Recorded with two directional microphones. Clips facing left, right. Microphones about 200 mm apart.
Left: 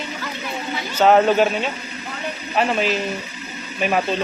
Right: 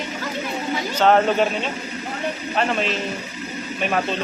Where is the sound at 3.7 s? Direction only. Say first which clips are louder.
Left 3 dB; 5° left (ahead or behind).